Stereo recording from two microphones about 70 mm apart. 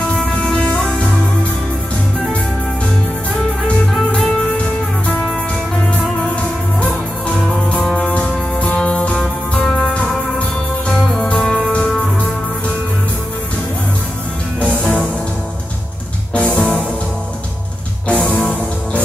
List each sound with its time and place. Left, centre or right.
0.1 s music: centre
5.0 s music: centre
6.3 s music: centre
11.3 s music: centre
14.8 s music: centre
16.3 s music: centre
18.0 s music: centre